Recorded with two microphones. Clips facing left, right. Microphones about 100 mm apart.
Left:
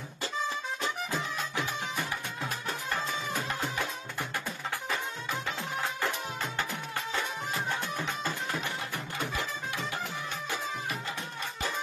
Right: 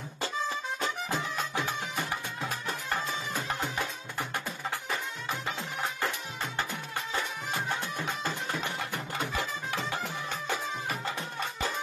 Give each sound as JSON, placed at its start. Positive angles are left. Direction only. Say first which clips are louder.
{"t": 1.1, "sound": "music", "louder": "right 1 dB", "side_deg": -15}
{"t": 8.0, "sound": "music", "louder": "even", "side_deg": -15}